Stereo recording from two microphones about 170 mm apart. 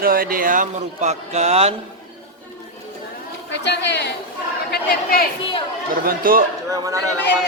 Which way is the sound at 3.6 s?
85° left.